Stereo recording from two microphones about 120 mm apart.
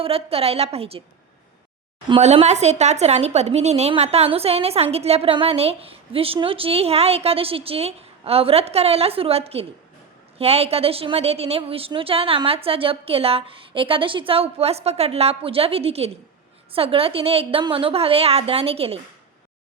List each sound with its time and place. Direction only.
0.0 s a woman's voice: 55° right (ahead or behind)
2.2 s a woman's voice: 65° right (ahead or behind)